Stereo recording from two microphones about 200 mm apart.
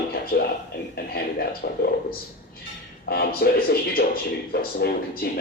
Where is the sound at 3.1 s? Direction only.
50° left (ahead or behind).